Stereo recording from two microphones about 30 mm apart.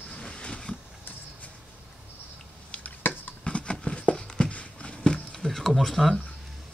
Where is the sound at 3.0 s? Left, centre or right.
Left.